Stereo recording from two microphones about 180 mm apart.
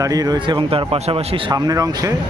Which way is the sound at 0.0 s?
20° right (ahead or behind).